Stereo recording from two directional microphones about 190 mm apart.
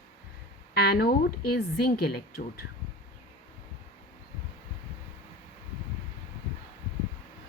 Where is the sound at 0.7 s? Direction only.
55° left (ahead or behind).